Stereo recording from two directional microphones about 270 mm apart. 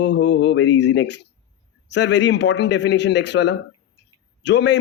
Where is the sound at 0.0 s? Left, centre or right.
Left.